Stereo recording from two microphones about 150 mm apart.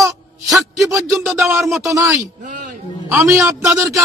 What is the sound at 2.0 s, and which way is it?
Speech, 20° right (ahead or behind).